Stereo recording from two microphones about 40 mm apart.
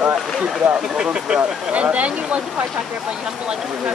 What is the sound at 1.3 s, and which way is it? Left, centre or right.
Speech, right.